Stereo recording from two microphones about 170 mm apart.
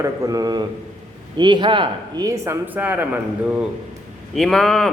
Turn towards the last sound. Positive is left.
turn(degrees=0)  # may be behind; listen again after turning